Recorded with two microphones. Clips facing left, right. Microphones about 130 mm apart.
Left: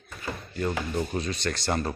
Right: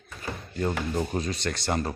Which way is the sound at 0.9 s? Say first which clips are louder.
Right 1 dB; 20° right (ahead or behind).